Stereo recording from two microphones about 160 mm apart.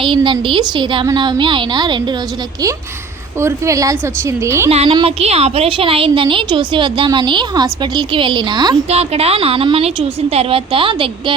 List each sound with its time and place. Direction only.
0.0 s a woman's voice: 30° right (ahead or behind)
3.4 s a woman's voice: 20° right (ahead or behind)
4.7 s a woman's voice: 40° right (ahead or behind)
8.9 s a woman's voice: 40° right (ahead or behind)